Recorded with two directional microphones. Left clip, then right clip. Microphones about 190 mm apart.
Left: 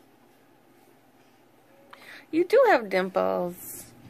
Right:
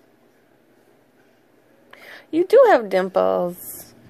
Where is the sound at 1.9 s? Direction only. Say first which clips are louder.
Right 5 dB; 30° right (ahead or behind).